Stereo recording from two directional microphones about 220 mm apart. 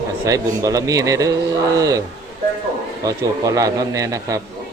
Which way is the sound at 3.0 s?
15° right (ahead or behind).